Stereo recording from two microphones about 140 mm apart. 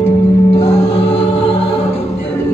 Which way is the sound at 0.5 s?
50° left (ahead or behind).